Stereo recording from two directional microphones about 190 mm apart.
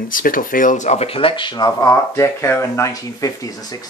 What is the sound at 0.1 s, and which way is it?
Speech, 45° left (ahead or behind).